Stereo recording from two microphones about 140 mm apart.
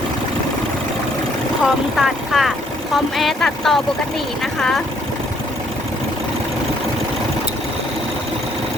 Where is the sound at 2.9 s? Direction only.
Centre (ahead or behind).